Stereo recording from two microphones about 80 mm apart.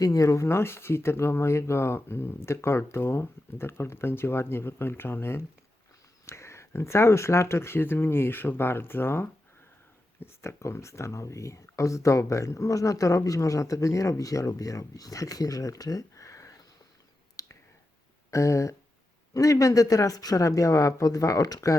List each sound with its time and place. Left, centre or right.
0.0 s speech: left
17.4 s a sound: left
18.3 s speech: left